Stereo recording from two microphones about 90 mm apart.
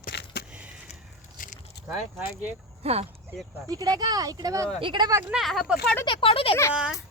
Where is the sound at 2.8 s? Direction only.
90° right.